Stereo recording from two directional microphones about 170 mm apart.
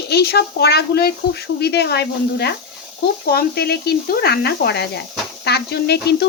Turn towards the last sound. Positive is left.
turn(degrees=75)  # may be behind; listen again after turning